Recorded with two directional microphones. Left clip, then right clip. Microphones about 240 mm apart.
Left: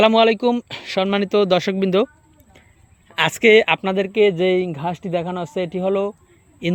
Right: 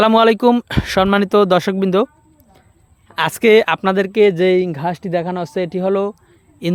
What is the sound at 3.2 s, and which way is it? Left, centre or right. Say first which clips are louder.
Speech: right 1 dB; centre.